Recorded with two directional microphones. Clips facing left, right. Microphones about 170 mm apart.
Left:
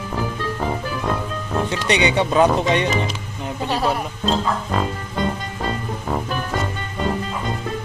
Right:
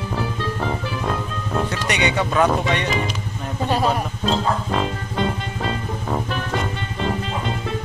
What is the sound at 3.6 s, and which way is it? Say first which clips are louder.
Speech: right 1 dB; 15° right (ahead or behind).